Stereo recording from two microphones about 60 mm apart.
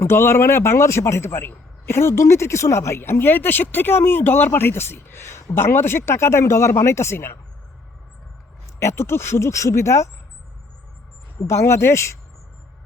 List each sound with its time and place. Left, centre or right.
0.0 s a man's voice: left
8.8 s a man's voice: left
11.4 s a man's voice: left